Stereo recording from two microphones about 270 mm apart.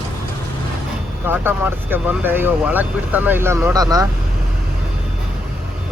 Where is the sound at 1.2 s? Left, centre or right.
Centre.